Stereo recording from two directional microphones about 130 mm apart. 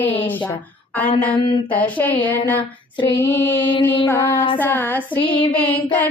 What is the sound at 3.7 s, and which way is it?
Female singing, 40° left (ahead or behind).